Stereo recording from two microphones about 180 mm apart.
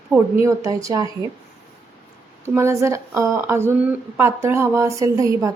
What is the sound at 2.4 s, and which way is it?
Speech, 15° right (ahead or behind).